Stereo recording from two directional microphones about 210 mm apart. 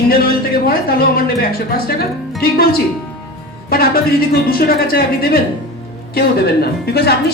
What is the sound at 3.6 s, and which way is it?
Speech, 45° left (ahead or behind).